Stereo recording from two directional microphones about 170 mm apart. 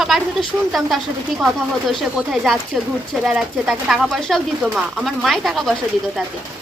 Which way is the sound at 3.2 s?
5° right (ahead or behind).